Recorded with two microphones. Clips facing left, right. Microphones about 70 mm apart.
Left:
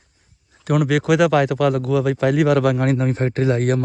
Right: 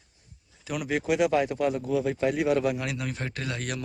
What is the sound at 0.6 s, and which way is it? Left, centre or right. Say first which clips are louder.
Speech: left 10 dB; left.